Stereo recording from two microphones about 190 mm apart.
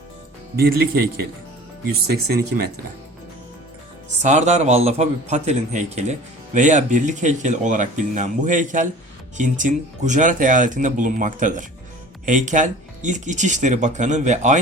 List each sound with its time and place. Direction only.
0.5 s speech: 55° right (ahead or behind)
4.2 s a man's voice: 40° right (ahead or behind)